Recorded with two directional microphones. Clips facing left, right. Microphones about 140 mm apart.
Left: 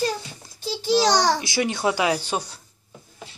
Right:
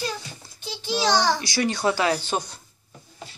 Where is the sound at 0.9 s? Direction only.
40° left (ahead or behind).